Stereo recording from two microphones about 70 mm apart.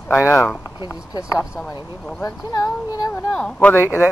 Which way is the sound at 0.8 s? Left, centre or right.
Left.